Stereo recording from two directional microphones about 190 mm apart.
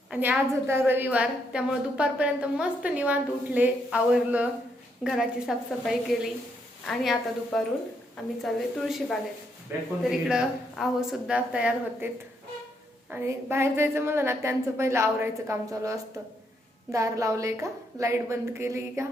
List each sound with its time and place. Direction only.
0.1 s a woman's voice: 10° right (ahead or behind)
13.1 s a woman's voice: 10° right (ahead or behind)